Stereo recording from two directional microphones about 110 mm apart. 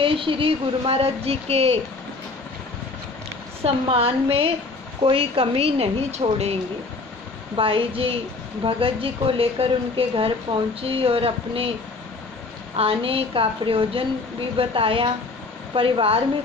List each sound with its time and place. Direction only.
0.0 s a woman's voice: 55° right (ahead or behind)
3.6 s a woman's voice: 60° right (ahead or behind); by 6.2 s 75° right (ahead or behind)
7.5 s a woman's voice: 55° right (ahead or behind)
12.7 s a woman's voice: 60° right (ahead or behind)